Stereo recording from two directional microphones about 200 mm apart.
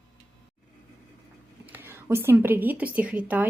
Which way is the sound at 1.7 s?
10° right (ahead or behind).